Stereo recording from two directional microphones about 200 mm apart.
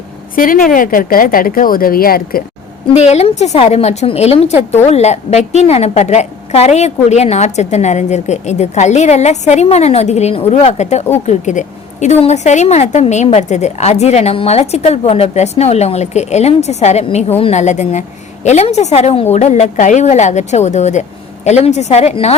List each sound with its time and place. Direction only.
0.3 s a woman's voice: 45° left (ahead or behind)
2.9 s a woman's voice: 35° left (ahead or behind)